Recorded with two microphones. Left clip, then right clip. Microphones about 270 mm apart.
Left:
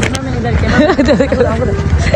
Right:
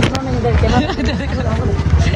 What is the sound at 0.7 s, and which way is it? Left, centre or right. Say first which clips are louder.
Speech: left 7 dB; centre.